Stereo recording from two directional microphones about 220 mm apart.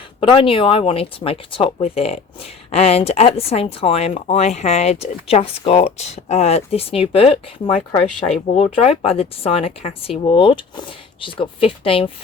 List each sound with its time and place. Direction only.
0.2 s speech: 25° left (ahead or behind)